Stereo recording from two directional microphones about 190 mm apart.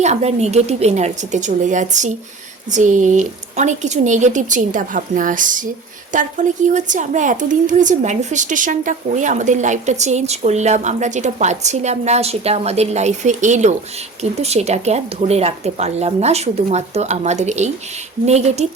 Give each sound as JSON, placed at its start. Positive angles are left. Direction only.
{"t": 0.0, "sound": "a woman's voice", "side_deg": -35}